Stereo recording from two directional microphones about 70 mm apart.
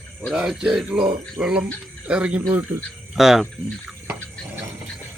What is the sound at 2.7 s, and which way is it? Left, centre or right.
Speech, right.